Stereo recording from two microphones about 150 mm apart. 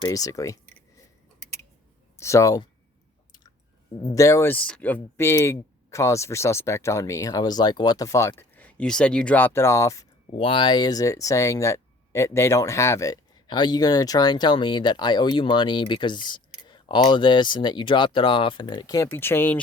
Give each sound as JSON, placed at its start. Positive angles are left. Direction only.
{"t": 0.0, "sound": "speech", "side_deg": 25}
{"t": 2.1, "sound": "speech", "side_deg": 20}
{"t": 4.0, "sound": "speech", "side_deg": 20}
{"t": 10.3, "sound": "speech", "side_deg": 35}
{"t": 19.1, "sound": "speech", "side_deg": 15}